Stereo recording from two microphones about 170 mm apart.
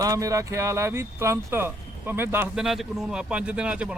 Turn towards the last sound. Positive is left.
turn(degrees=-5)  # may be behind; listen again after turning